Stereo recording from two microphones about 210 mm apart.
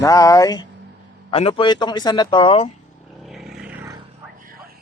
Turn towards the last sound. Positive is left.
turn(degrees=-5)  # may be behind; listen again after turning